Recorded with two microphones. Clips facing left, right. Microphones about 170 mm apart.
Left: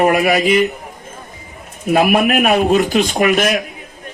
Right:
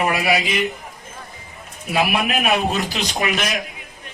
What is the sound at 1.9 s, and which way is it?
A man's voice, 50° left (ahead or behind).